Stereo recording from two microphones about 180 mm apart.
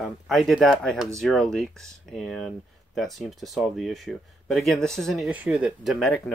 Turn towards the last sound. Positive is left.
turn(degrees=0)  # may be behind; listen again after turning